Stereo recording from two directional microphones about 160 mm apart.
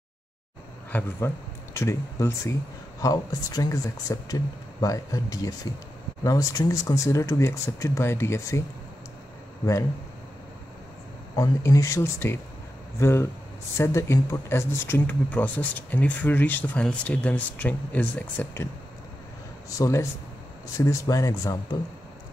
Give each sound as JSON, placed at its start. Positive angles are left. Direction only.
{"t": 0.9, "sound": "speech", "side_deg": 15}
{"t": 11.3, "sound": "speech", "side_deg": 20}
{"t": 19.8, "sound": "speech", "side_deg": 20}